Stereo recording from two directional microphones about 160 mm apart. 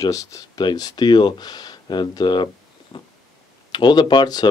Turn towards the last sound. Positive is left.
turn(degrees=25)  # may be behind; listen again after turning